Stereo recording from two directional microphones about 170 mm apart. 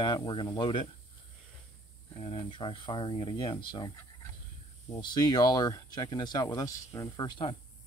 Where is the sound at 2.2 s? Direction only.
30° left (ahead or behind).